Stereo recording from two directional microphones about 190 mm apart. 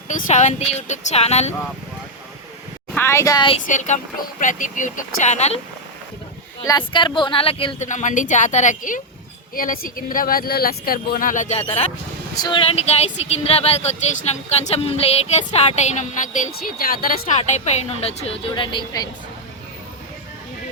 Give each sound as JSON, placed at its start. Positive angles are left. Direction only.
{"t": 0.3, "sound": "speech", "side_deg": 40}
{"t": 2.9, "sound": "speech", "side_deg": 15}
{"t": 3.7, "sound": "speech", "side_deg": 40}
{"t": 6.7, "sound": "speech", "side_deg": 25}
{"t": 7.9, "sound": "speech", "side_deg": 40}
{"t": 12.3, "sound": "speech", "side_deg": 20}
{"t": 16.6, "sound": "speech", "side_deg": 50}